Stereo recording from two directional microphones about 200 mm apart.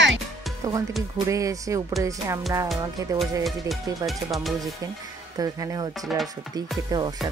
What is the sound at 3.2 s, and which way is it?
Music, centre (ahead or behind).